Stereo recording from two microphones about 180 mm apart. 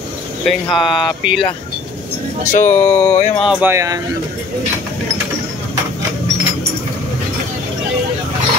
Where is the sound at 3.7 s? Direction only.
15° right (ahead or behind).